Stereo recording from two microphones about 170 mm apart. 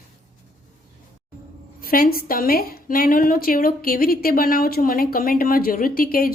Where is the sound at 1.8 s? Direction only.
60° left (ahead or behind).